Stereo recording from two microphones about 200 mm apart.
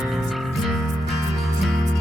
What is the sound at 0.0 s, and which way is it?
Music, centre (ahead or behind).